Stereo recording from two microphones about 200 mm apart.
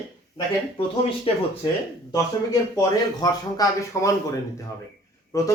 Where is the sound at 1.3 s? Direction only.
30° left (ahead or behind).